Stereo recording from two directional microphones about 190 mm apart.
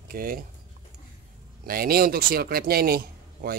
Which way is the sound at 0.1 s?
50° right (ahead or behind).